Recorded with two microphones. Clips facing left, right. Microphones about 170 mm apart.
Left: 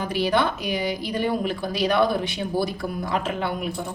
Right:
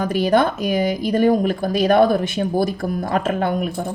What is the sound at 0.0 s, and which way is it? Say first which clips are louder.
Speech: right 5 dB; 45° right (ahead or behind).